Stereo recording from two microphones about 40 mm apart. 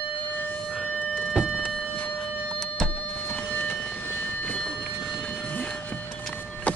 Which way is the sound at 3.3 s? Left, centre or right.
Left.